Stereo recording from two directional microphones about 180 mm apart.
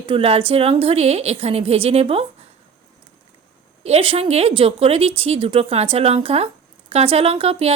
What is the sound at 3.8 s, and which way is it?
A woman's voice, 30° right (ahead or behind).